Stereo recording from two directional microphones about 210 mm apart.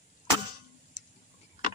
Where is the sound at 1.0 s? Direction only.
60° right (ahead or behind).